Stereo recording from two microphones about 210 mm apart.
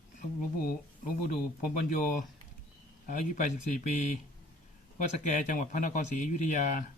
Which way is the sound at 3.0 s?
40° left (ahead or behind).